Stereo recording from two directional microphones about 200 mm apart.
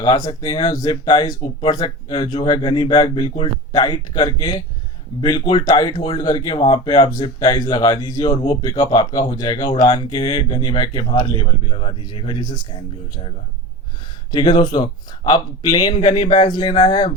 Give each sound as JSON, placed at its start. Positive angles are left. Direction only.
{"t": 0.0, "sound": "speech", "side_deg": 20}
{"t": 14.3, "sound": "speech", "side_deg": 25}